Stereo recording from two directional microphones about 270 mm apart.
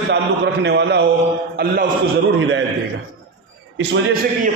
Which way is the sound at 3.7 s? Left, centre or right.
Right.